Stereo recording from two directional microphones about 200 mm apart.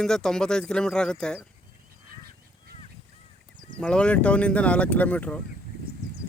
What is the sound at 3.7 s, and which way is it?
Speech, 5° left (ahead or behind).